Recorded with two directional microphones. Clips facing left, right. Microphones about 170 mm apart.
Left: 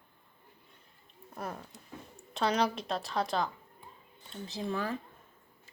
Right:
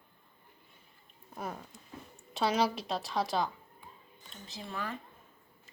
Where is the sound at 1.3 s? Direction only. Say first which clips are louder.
Even; centre (ahead or behind).